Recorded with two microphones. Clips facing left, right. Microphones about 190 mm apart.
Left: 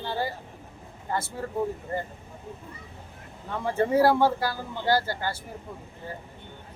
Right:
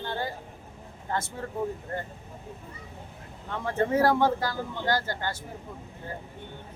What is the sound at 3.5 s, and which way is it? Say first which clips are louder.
Speech: left 2 dB; 10° left (ahead or behind).